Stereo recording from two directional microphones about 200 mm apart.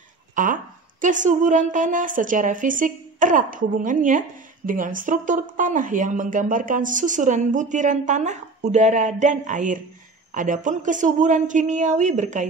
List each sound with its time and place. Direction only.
0.4 s speech: 40° right (ahead or behind)